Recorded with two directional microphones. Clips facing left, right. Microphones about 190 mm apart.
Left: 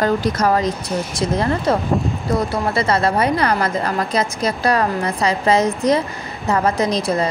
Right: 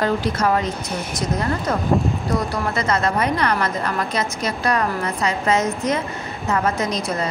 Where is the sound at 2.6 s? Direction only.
30° left (ahead or behind).